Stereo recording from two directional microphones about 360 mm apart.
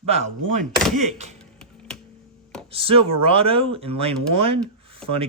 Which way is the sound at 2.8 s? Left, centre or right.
Centre.